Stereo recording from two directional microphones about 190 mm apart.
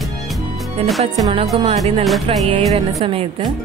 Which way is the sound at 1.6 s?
35° right (ahead or behind).